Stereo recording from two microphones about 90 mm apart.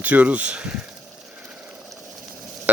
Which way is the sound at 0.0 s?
15° right (ahead or behind).